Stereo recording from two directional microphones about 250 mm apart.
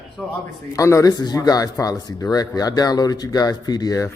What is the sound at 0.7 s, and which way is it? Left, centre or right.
Speech, centre.